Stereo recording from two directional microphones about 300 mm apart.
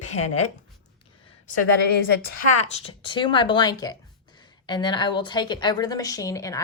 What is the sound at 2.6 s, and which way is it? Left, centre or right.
Speech, centre.